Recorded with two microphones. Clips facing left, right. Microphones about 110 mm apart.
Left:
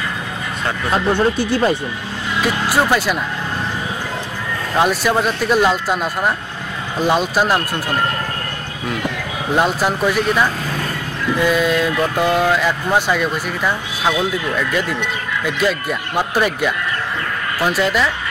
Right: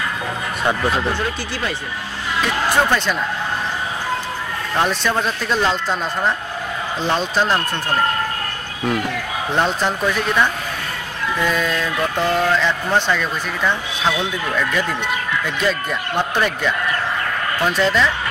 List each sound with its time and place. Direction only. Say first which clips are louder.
1.2 s speech: left 8 dB; 30° left (ahead or behind)
2.4 s speech: left 1 dB; 10° left (ahead or behind)
4.7 s speech: left 3 dB; 10° left (ahead or behind)
9.6 s speech: left 2 dB; 10° left (ahead or behind)
15.4 s speech: left 6 dB; 5° left (ahead or behind)